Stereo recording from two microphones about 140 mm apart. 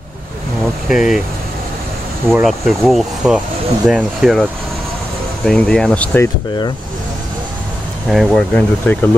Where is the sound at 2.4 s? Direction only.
Centre (ahead or behind).